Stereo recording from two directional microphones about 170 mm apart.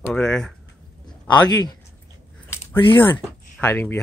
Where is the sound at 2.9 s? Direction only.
10° left (ahead or behind).